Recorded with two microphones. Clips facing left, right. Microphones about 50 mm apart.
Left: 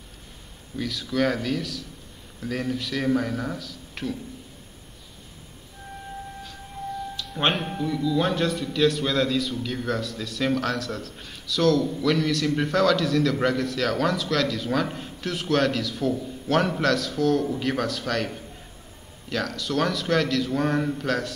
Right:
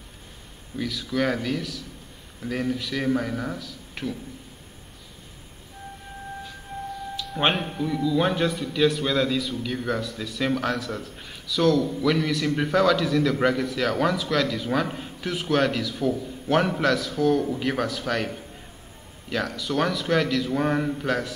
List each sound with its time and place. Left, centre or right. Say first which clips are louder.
0.7 s a man's voice: left 1 dB; centre
7.2 s a man's voice: right 2 dB; centre